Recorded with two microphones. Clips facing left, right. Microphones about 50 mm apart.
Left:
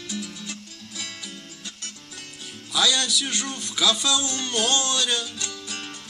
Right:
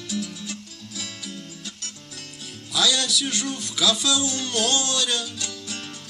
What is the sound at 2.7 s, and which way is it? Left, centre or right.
Speech, centre.